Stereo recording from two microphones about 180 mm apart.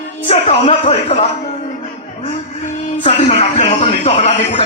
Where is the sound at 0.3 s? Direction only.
35° left (ahead or behind).